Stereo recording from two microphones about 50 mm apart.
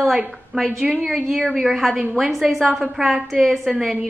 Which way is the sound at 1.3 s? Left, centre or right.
Centre.